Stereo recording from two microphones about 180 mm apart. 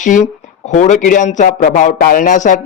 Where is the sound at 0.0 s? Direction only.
45° left (ahead or behind).